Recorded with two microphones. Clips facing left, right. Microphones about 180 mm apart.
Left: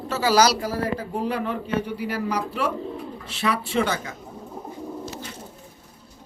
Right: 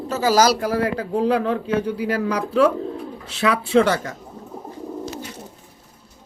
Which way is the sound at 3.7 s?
90° right.